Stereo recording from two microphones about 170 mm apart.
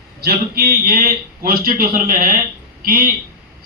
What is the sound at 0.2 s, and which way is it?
A man's voice, 65° right (ahead or behind).